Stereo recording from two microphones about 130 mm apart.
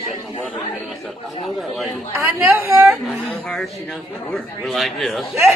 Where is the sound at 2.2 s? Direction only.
15° right (ahead or behind).